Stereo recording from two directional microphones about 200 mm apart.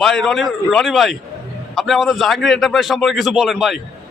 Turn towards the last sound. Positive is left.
turn(degrees=0)  # may be behind; listen again after turning